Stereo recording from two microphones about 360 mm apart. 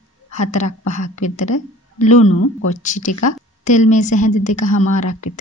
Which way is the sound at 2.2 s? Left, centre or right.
Left.